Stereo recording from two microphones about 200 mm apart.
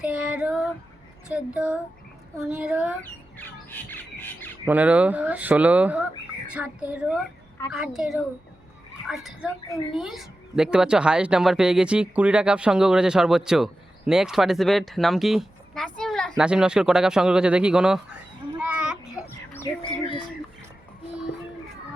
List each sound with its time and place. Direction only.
0.0 s child singing: 5° right (ahead or behind)
1.3 s a woman's voice: 5° right (ahead or behind)
3.0 s squawk: 10° left (ahead or behind)
4.6 s a woman's voice: 10° right (ahead or behind)
18.6 s a sound: 5° right (ahead or behind)